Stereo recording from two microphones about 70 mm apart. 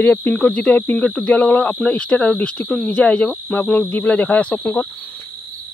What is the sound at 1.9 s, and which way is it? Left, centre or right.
Speech, centre.